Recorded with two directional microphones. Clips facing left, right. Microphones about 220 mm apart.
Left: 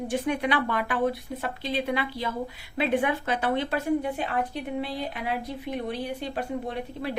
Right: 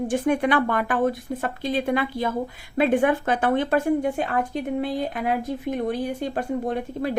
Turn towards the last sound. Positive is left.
turn(degrees=-45)  # may be behind; listen again after turning